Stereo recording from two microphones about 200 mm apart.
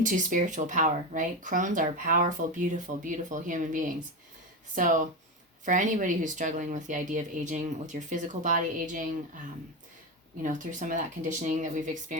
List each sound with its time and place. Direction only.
0.0 s speech: 40° right (ahead or behind)
10.4 s speech: 40° right (ahead or behind)